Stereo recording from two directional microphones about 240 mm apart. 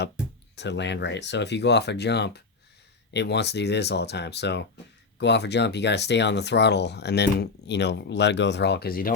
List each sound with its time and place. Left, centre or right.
0.5 s speech: left